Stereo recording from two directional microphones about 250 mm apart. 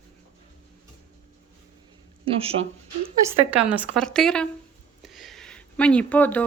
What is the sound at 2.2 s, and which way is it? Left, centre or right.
Speech, right.